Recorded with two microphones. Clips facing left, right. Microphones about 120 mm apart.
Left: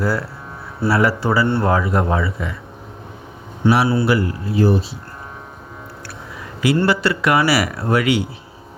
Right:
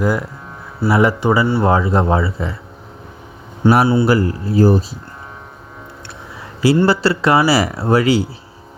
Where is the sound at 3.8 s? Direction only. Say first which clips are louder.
Right 3 dB; 30° right (ahead or behind).